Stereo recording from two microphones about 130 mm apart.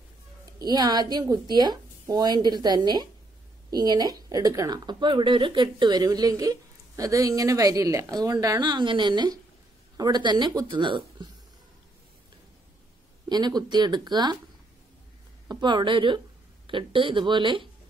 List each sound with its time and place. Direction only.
0.6 s a woman's voice: 30° right (ahead or behind)
13.3 s a woman's voice: 30° right (ahead or behind)
15.6 s a woman's voice: 35° right (ahead or behind)